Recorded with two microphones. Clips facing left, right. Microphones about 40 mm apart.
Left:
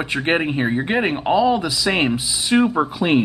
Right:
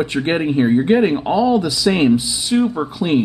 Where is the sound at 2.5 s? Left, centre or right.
Left.